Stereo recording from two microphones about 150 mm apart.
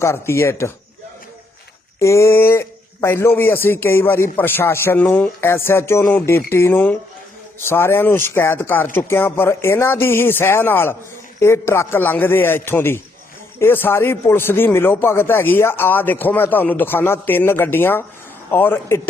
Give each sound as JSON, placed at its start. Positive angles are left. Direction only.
{"t": 0.0, "sound": "speech", "side_deg": 20}
{"t": 2.0, "sound": "speech", "side_deg": 20}